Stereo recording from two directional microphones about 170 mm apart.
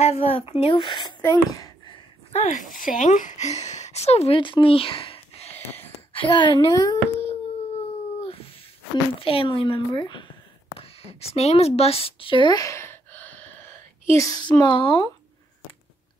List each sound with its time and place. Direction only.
0.0 s speech: 35° left (ahead or behind)
2.3 s speech: 45° left (ahead or behind)
6.1 s a child's voice: 25° left (ahead or behind)
8.2 s a sound: 35° left (ahead or behind)
9.2 s speech: 30° left (ahead or behind)